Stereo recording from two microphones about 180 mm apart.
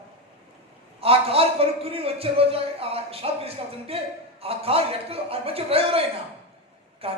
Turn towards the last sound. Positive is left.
turn(degrees=-30)  # may be behind; listen again after turning